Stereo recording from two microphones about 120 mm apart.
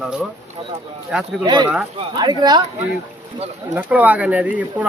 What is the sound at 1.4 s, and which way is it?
Speech, 35° right (ahead or behind).